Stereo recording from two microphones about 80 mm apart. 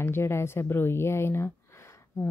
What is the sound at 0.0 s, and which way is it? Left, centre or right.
A woman's voice, left.